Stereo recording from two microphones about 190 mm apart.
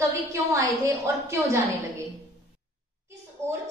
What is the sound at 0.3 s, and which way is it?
A woman's voice, 15° right (ahead or behind).